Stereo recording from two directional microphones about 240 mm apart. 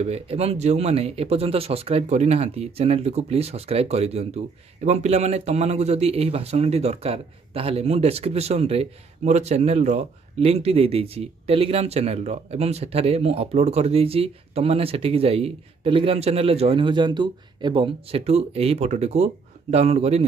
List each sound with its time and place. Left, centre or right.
0.0 s speech: right